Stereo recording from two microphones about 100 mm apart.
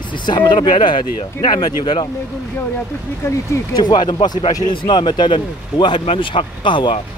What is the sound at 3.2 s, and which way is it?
Speech, 30° left (ahead or behind).